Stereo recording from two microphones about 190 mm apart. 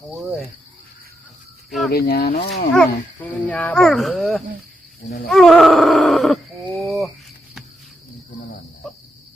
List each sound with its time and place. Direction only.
0.1 s cricket: centre (ahead or behind)
1.9 s speech: 55° left (ahead or behind)
2.7 s speech: 5° left (ahead or behind)
5.3 s groan: centre (ahead or behind)